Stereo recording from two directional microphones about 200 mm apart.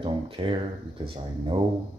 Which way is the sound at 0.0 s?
25° right (ahead or behind).